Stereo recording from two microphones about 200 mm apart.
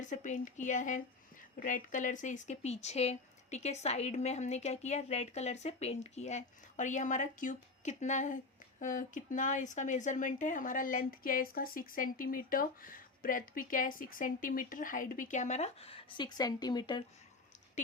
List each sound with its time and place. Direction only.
0.0 s speech: 40° left (ahead or behind); by 17.0 s 20° left (ahead or behind)